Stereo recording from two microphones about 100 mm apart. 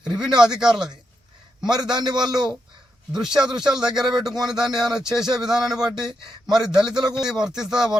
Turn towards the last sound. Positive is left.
turn(degrees=-5)  # may be behind; listen again after turning